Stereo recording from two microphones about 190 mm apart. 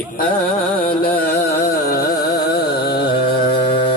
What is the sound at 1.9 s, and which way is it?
Carnatic music, 60° left (ahead or behind).